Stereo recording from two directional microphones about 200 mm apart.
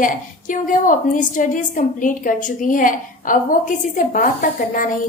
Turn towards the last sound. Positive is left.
turn(degrees=45)  # may be behind; listen again after turning